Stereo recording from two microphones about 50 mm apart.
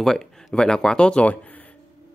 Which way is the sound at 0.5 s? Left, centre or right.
Centre.